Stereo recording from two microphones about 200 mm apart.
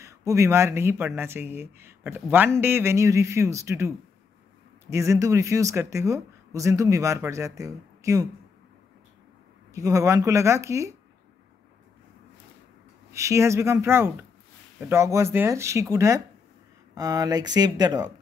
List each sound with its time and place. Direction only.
0.0 s speech: 15° right (ahead or behind)
9.8 s speech: 15° right (ahead or behind)
13.1 s speech: 15° right (ahead or behind)